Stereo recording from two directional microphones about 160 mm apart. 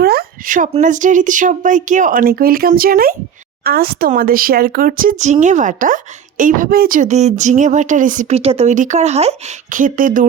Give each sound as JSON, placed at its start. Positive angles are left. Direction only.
{"t": 0.0, "sound": "speech", "side_deg": -75}